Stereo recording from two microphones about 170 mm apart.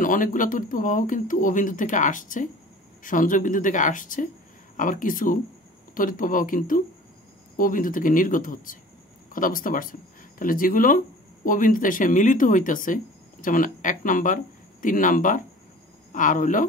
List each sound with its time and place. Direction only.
0.0 s speech: 50° left (ahead or behind)